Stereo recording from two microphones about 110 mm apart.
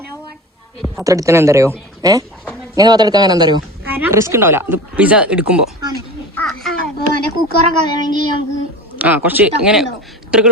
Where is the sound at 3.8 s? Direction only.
15° right (ahead or behind).